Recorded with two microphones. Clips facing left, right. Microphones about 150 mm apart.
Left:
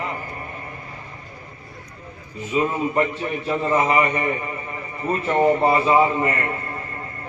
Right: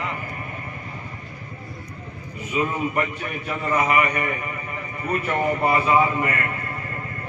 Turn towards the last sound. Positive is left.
turn(degrees=30)  # may be behind; listen again after turning